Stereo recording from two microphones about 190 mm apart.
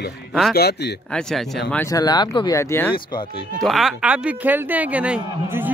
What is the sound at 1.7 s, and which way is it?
Speech, 15° left (ahead or behind).